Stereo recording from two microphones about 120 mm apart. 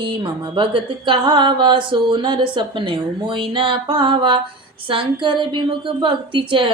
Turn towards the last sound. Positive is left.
turn(degrees=-40)  # may be behind; listen again after turning